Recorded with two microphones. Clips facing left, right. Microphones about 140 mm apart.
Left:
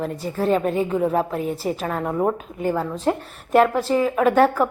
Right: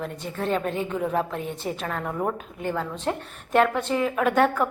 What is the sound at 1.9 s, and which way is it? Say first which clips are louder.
Speech: left 6 dB; 15° left (ahead or behind).